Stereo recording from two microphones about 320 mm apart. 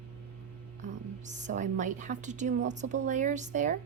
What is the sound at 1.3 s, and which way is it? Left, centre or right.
A woman's voice, right.